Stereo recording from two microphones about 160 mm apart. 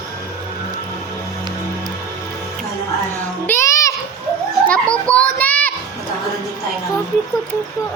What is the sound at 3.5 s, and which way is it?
Music, 20° left (ahead or behind).